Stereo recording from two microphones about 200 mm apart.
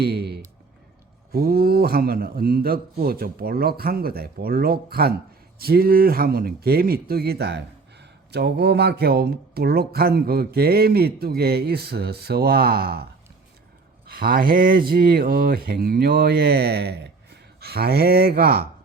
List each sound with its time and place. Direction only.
0.0 s a sound: 55° right (ahead or behind)
1.3 s speech: 50° right (ahead or behind)
14.1 s speech: 50° right (ahead or behind)